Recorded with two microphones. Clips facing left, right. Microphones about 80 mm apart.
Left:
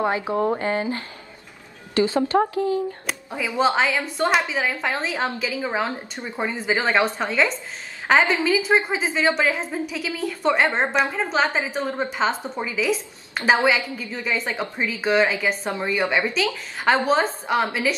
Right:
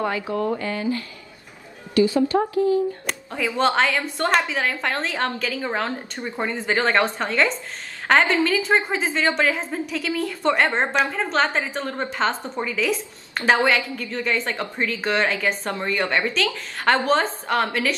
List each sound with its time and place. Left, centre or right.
0.0 s speech: left
2.3 s speech: left
3.1 s a woman's voice: centre